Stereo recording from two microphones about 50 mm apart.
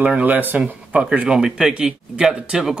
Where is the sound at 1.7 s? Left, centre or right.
Right.